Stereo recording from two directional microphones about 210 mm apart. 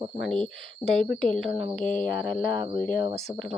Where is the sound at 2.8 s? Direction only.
40° left (ahead or behind).